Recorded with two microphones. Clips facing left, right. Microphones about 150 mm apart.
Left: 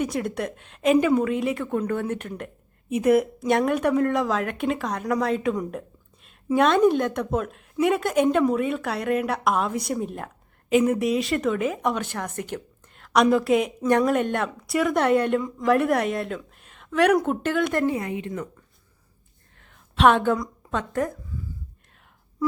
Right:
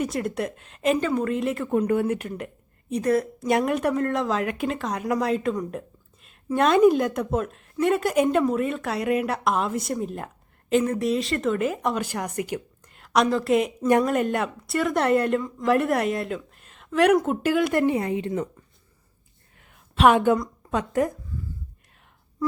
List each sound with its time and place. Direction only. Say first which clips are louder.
0.0 s a woman's voice: even; centre (ahead or behind)
1.7 s speech: right 3 dB; 10° right (ahead or behind)
2.9 s speech: left 3 dB; 15° left (ahead or behind)
3.4 s a woman's voice: left 1 dB; centre (ahead or behind)
12.8 s a sound: left 1 dB; centre (ahead or behind)
13.3 s a woman's voice: left 1 dB; centre (ahead or behind)
18.0 s a woman's voice: right 4 dB; 35° right (ahead or behind)
19.5 s a sound: even; 10° right (ahead or behind)